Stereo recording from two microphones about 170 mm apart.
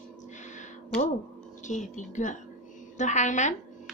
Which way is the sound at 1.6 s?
45° left (ahead or behind).